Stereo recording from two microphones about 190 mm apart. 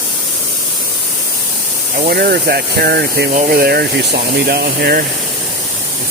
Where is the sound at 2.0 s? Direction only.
55° right (ahead or behind).